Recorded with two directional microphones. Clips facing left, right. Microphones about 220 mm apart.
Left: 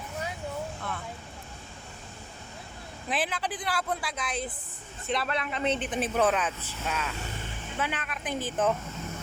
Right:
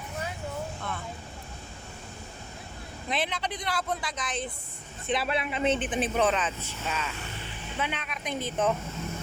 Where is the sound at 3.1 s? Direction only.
5° left (ahead or behind).